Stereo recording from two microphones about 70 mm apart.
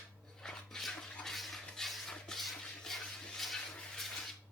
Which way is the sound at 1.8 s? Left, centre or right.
Centre.